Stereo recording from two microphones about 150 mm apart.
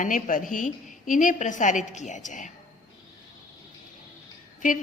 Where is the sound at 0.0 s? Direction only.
60° left (ahead or behind).